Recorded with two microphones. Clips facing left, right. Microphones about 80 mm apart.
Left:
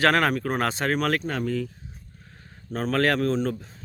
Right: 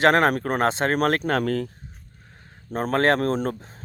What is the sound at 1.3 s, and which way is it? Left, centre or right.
Speech, right.